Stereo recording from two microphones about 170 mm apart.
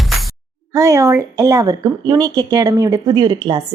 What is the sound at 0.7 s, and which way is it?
A woman's voice, 20° right (ahead or behind).